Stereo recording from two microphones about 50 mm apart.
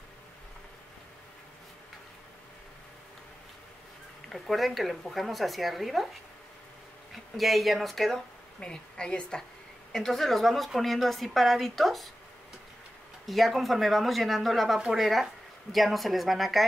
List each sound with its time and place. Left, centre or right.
4.3 s a woman's voice: centre
7.3 s a woman's voice: centre
8.5 s a woman's voice: centre
9.9 s a woman's voice: centre
13.3 s a woman's voice: centre